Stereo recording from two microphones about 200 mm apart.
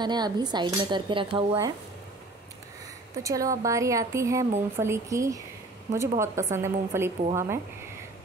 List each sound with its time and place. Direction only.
0.0 s speech: 20° right (ahead or behind)
3.2 s a woman's voice: 15° right (ahead or behind)